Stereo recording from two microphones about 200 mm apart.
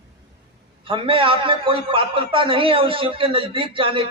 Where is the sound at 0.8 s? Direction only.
25° right (ahead or behind).